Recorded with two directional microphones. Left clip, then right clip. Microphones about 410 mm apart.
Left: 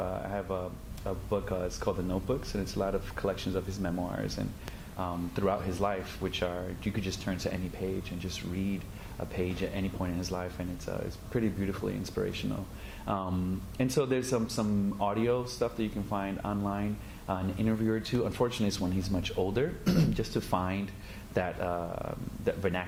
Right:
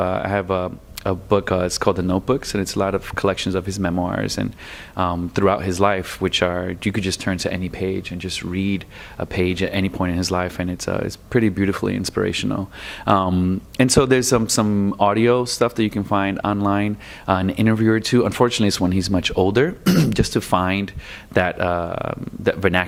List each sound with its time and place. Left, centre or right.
0.0 s speech: right
13.7 s speech: right